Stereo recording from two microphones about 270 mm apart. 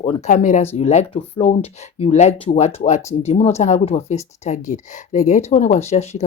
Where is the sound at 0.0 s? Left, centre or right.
Left.